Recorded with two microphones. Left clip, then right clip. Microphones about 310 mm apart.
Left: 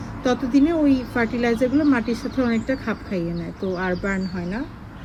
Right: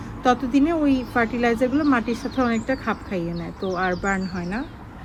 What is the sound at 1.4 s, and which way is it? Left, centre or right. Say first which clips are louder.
Speech: left 1 dB; centre.